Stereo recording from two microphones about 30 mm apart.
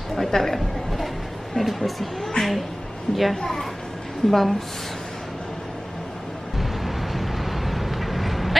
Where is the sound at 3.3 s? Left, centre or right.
Centre.